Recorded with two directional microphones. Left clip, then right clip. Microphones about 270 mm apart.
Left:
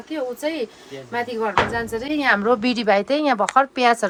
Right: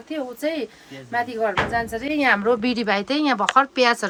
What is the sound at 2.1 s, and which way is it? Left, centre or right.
Speech, centre.